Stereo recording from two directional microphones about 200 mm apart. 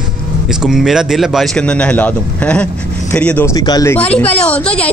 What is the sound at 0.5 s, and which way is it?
A man's voice, centre (ahead or behind).